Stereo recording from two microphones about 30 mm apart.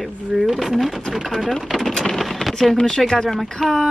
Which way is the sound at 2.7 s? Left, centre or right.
Centre.